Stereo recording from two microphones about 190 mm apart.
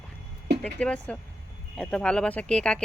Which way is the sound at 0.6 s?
5° left (ahead or behind).